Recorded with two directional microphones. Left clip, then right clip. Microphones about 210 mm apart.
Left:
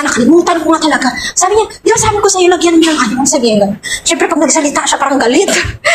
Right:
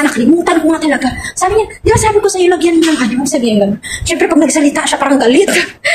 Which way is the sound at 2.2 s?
20° right (ahead or behind).